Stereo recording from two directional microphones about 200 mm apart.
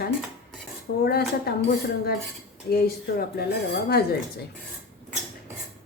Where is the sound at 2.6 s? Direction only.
50° left (ahead or behind).